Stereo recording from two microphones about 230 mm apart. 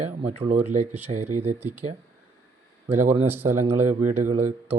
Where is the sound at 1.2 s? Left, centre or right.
Right.